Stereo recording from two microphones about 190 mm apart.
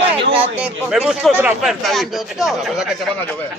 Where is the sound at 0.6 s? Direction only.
5° right (ahead or behind).